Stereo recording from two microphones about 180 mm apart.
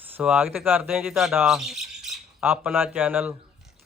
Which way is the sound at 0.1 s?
5° right (ahead or behind).